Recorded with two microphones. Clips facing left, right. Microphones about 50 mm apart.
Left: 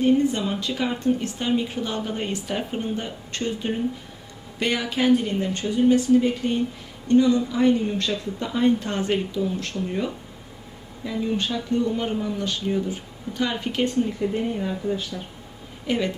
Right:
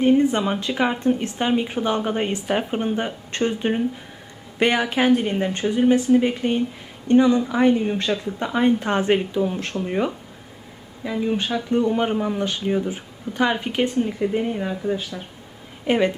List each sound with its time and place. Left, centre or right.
0.0 s speech: right